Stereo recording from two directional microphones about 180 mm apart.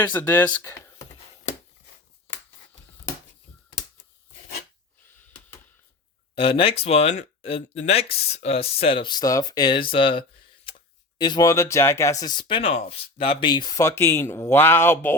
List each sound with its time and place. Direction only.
0.0 s speech: 10° left (ahead or behind)
6.3 s speech: 30° left (ahead or behind); by 15.1 s 10° left (ahead or behind)